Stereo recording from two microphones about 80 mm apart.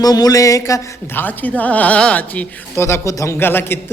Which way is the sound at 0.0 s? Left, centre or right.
Left.